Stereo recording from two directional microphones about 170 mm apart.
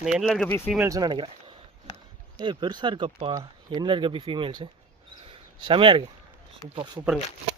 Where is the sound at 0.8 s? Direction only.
20° right (ahead or behind).